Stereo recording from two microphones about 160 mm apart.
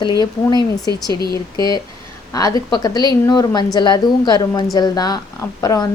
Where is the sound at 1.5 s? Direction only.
25° left (ahead or behind).